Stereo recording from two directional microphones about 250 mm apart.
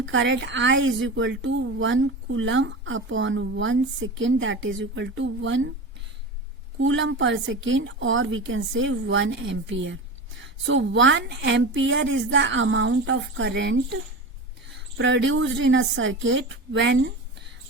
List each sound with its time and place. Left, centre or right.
0.1 s a woman's voice: right
6.7 s a woman's voice: right